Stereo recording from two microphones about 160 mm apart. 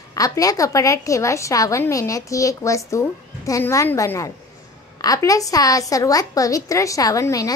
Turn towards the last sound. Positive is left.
turn(degrees=20)  # may be behind; listen again after turning